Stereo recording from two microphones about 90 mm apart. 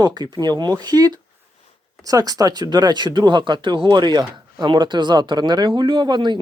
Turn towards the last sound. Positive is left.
turn(degrees=-60)  # may be behind; listen again after turning